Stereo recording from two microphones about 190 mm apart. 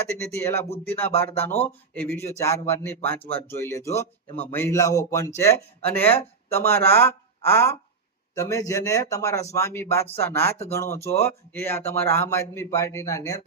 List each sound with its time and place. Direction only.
0.2 s speech: 15° left (ahead or behind)